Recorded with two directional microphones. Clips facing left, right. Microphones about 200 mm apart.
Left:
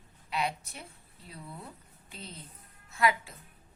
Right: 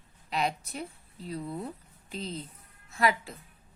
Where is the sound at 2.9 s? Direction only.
35° right (ahead or behind).